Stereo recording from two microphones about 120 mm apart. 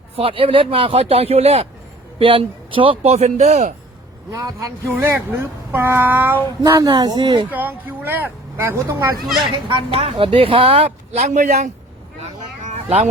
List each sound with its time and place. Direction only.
0.2 s speech: 50° right (ahead or behind)
2.1 s a man's voice: 45° right (ahead or behind); by 3.8 s 70° right (ahead or behind)
4.3 s speech: 30° right (ahead or behind)
6.6 s a woman's voice: 30° right (ahead or behind)
7.5 s speech: 15° right (ahead or behind)
9.6 s speech: 45° right (ahead or behind); by 11.7 s 80° right
12.2 s vehicle: 65° right (ahead or behind)